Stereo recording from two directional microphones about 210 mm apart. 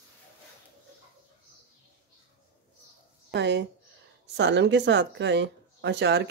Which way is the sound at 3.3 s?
55° right (ahead or behind).